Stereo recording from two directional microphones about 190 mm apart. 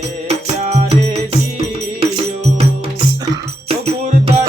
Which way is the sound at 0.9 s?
35° right (ahead or behind).